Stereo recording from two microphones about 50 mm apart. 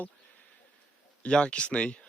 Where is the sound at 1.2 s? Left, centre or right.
Left.